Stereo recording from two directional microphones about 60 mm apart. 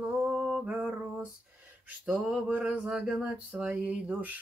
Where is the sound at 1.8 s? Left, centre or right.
Right.